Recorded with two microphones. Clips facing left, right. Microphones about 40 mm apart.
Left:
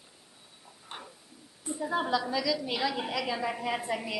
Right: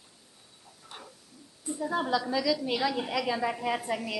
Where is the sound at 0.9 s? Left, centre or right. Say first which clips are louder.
Left 3 dB; left.